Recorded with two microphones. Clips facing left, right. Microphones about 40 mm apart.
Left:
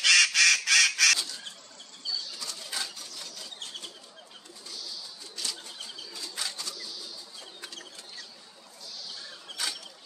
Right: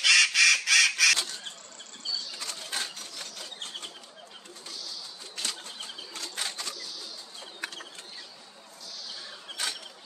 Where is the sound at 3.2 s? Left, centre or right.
Right.